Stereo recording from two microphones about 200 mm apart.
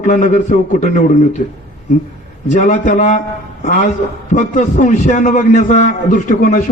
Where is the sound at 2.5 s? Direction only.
35° left (ahead or behind).